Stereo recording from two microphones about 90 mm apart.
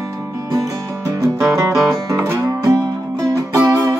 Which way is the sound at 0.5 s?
40° right (ahead or behind).